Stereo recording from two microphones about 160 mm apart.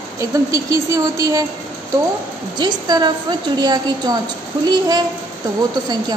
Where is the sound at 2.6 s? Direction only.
25° right (ahead or behind).